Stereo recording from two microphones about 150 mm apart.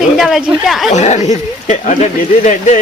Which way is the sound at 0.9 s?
50° left (ahead or behind).